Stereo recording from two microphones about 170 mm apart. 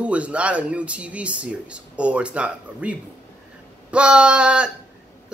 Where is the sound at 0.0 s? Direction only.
5° right (ahead or behind).